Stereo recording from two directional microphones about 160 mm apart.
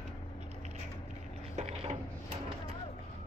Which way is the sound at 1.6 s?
45° right (ahead or behind).